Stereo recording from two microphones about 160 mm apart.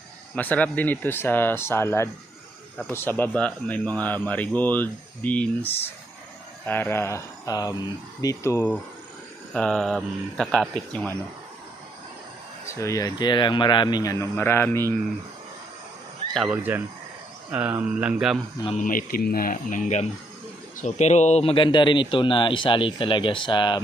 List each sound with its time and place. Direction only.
0.3 s speech: 10° left (ahead or behind)
9.5 s speech: 5° left (ahead or behind)
12.6 s a man's voice: 20° left (ahead or behind)
16.3 s speech: centre (ahead or behind)
18.8 s speech: 60° left (ahead or behind); by 23.8 s 30° left (ahead or behind)